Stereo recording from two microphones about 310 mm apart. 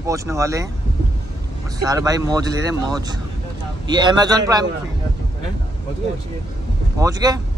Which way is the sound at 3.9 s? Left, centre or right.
Centre.